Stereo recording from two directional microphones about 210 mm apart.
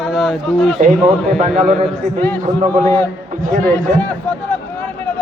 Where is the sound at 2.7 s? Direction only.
5° left (ahead or behind).